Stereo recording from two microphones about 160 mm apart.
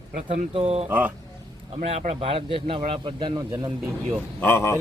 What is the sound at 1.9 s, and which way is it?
A man's voice, 40° right (ahead or behind).